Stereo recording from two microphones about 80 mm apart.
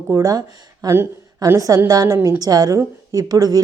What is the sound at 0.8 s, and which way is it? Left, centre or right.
A woman's voice, right.